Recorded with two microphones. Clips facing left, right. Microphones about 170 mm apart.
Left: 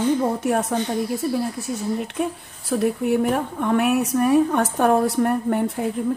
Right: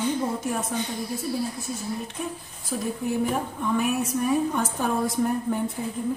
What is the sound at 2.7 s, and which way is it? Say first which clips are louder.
A woman's voice: left 7 dB; 70° left (ahead or behind).